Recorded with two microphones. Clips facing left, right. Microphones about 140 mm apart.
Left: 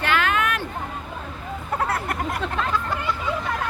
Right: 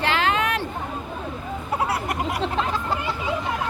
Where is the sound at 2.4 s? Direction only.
30° right (ahead or behind).